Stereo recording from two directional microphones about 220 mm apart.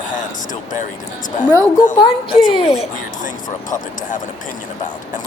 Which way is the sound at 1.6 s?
20° left (ahead or behind).